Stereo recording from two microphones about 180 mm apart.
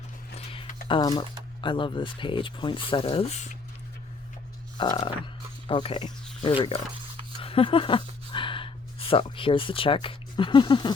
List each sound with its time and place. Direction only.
0.3 s a sound: 30° left (ahead or behind)
0.9 s speech: 25° left (ahead or behind); by 3.6 s 40° left (ahead or behind)
5.2 s music: 25° left (ahead or behind)
6.4 s speech: 30° left (ahead or behind)